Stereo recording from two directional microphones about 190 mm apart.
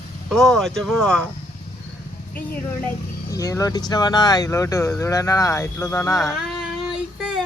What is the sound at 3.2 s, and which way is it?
Speech, 15° left (ahead or behind).